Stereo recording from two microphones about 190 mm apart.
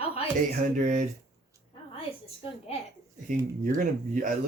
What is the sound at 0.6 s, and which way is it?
Speech, 40° right (ahead or behind).